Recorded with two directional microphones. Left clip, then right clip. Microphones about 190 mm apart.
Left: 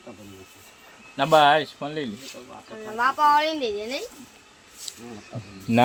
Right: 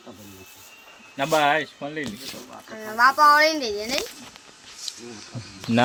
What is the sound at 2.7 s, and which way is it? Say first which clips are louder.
Speech: right 5 dB; 40° right (ahead or behind).